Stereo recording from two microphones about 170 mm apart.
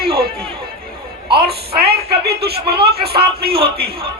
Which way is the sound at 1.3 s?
65° right (ahead or behind).